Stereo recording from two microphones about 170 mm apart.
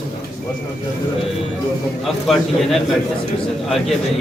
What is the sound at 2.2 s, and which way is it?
Speech, centre (ahead or behind).